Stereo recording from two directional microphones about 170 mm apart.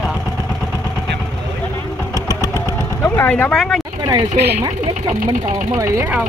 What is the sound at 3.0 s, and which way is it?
Speech, 10° left (ahead or behind).